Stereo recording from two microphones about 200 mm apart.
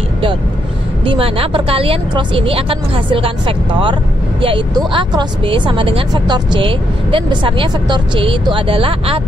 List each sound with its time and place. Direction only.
1.0 s speech: 25° right (ahead or behind)